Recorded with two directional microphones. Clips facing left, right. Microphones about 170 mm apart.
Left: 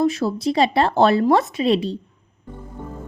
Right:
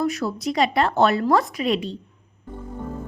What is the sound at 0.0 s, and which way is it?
A woman's voice, 25° left (ahead or behind).